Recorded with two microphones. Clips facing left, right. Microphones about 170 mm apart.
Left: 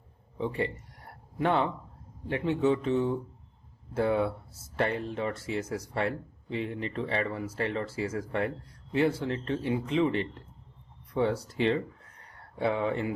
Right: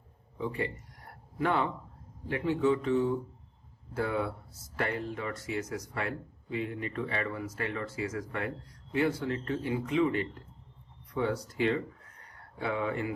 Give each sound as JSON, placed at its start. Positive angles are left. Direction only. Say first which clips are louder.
{"t": 0.3, "sound": "speech", "louder": "left 3 dB", "side_deg": 30}